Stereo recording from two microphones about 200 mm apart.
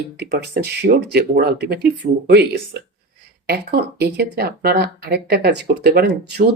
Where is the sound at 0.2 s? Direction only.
55° right (ahead or behind).